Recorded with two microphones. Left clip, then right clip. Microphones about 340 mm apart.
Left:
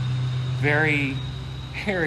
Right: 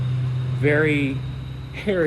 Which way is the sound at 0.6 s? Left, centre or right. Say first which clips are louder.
Right 2 dB; centre.